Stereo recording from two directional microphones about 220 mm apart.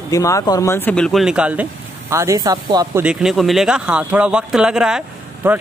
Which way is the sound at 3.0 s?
Centre (ahead or behind).